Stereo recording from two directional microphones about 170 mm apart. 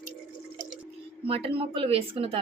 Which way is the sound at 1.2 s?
35° right (ahead or behind).